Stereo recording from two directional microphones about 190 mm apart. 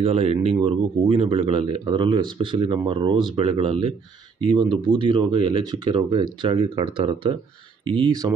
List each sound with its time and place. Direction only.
0.0 s speech: 30° right (ahead or behind)